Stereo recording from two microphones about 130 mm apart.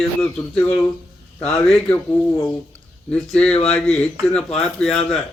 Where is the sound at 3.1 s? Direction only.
5° left (ahead or behind).